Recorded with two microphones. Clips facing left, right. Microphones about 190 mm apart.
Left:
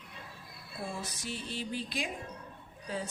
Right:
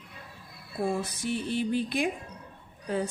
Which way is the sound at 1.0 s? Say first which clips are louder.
Right 9 dB; 55° right (ahead or behind).